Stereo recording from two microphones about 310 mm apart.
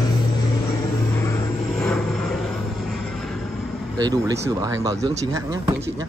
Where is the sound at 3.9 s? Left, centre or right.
Centre.